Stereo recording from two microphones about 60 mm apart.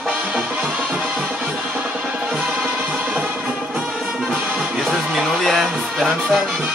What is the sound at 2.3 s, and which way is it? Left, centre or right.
Music, centre.